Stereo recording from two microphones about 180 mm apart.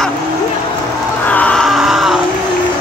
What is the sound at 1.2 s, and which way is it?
Music, 10° left (ahead or behind).